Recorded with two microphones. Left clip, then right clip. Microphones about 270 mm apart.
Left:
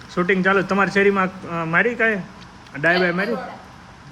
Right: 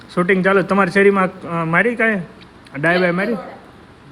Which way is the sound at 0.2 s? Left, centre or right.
Centre.